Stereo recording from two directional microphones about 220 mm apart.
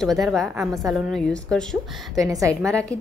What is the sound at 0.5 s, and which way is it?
Speech, 10° right (ahead or behind).